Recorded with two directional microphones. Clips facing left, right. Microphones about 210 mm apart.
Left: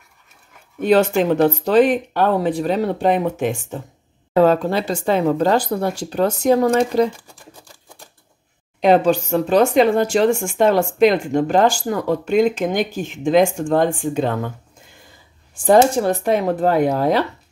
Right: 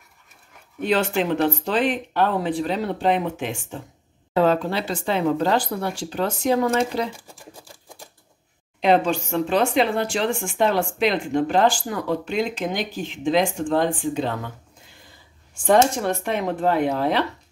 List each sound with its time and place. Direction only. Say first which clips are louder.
0.7 s speech: left 6 dB; 45° left (ahead or behind)
8.8 s speech: left 5 dB; 40° left (ahead or behind)
15.5 s speech: left 4 dB; 35° left (ahead or behind)